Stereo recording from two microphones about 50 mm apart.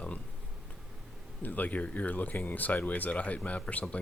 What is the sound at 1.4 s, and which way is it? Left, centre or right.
Speech, left.